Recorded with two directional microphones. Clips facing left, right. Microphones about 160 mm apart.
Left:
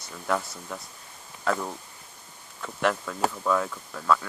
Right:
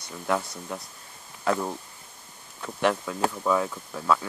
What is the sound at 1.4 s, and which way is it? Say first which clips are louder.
Speech: right 2 dB; 15° right (ahead or behind).